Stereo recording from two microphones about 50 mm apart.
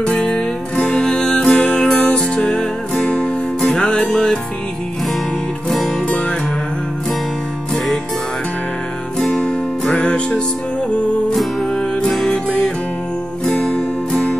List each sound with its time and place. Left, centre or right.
0.0 s music: centre
5.9 s music: left
7.7 s music: centre
9.3 s music: centre
13.5 s music: left